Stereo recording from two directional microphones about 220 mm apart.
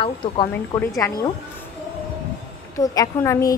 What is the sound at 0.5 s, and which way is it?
Speech, 10° left (ahead or behind).